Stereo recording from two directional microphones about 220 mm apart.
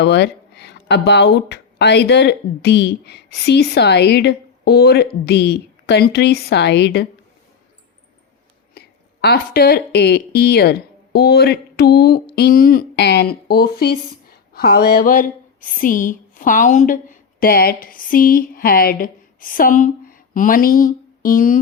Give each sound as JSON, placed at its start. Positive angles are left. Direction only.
{"t": 0.0, "sound": "speech", "side_deg": 50}
{"t": 8.7, "sound": "speech", "side_deg": 45}